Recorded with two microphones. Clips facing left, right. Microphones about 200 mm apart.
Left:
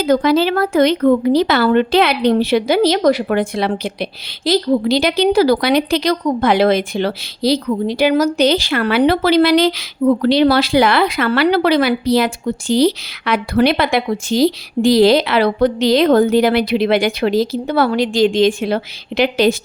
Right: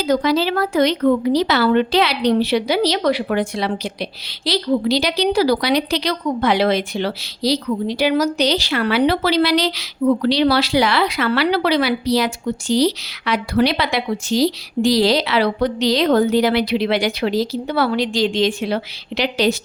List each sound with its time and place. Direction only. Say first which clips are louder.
0.0 s speech: left 4 dB; 55° left (ahead or behind)